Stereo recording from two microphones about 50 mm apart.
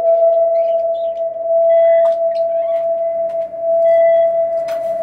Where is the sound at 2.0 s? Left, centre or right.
Centre.